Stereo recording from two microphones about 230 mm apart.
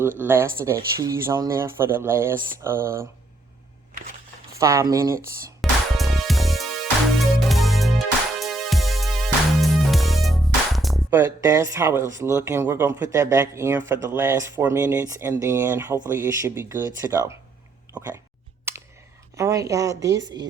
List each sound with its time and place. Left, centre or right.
0.2 s speech: centre
4.6 s speech: centre
5.6 s music: centre
12.1 s speech: centre
18.7 s clicking: centre
19.4 s speech: centre